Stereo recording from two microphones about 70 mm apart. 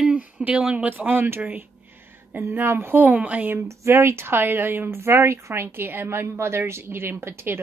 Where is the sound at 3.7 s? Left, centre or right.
Right.